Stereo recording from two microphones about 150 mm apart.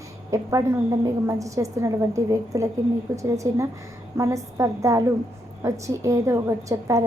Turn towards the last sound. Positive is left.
turn(degrees=-20)  # may be behind; listen again after turning